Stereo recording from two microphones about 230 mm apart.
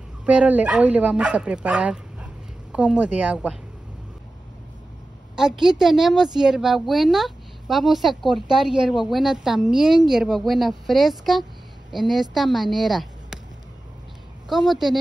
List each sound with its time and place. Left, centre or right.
0.2 s a woman's voice: centre
5.3 s a woman's voice: centre
14.5 s a woman's voice: centre